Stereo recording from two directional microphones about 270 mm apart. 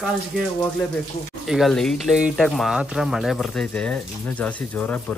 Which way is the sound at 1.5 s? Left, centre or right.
Centre.